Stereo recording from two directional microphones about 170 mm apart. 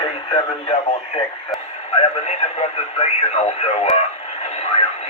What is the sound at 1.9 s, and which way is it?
Speech, 40° left (ahead or behind).